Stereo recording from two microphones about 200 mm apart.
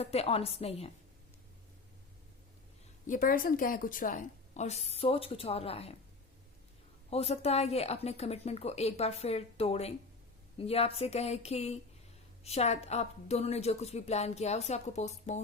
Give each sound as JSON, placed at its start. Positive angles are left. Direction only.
{"t": 0.0, "sound": "a woman's voice", "side_deg": 30}
{"t": 3.1, "sound": "a woman's voice", "side_deg": 45}
{"t": 7.1, "sound": "a woman's voice", "side_deg": 30}